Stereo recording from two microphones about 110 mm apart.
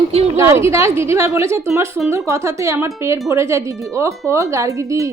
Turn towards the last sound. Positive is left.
turn(degrees=-30)  # may be behind; listen again after turning